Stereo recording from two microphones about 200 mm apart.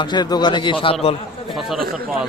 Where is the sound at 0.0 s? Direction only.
20° left (ahead or behind).